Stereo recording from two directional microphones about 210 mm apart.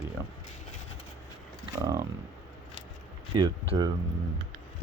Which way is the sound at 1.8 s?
15° right (ahead or behind).